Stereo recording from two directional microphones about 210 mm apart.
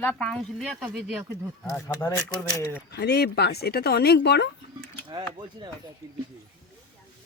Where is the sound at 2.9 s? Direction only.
50° left (ahead or behind).